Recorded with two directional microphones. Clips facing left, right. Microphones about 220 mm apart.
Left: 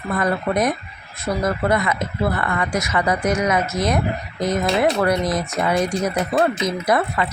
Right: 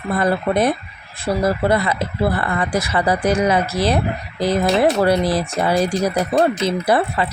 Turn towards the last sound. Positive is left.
turn(degrees=-30)  # may be behind; listen again after turning